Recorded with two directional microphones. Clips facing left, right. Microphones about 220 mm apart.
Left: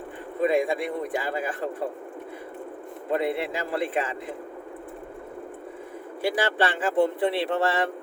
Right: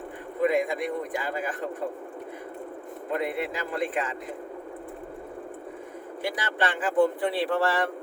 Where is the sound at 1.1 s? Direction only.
30° left (ahead or behind).